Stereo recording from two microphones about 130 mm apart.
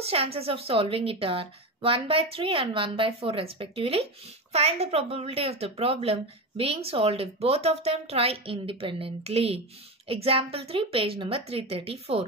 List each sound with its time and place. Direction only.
0.0 s a woman's voice: 50° right (ahead or behind)